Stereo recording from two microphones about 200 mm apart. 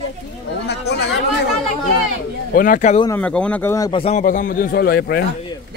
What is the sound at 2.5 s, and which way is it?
Speech, 45° left (ahead or behind).